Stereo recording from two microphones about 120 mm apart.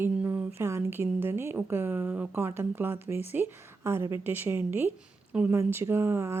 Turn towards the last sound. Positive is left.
turn(degrees=-20)  # may be behind; listen again after turning